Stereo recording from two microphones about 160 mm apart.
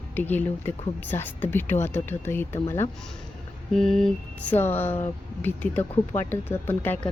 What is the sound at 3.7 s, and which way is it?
Speech, centre (ahead or behind).